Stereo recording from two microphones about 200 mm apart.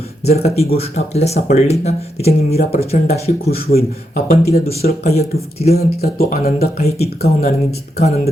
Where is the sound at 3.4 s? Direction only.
50° left (ahead or behind).